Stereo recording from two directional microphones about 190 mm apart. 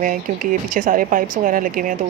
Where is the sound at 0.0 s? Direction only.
45° right (ahead or behind).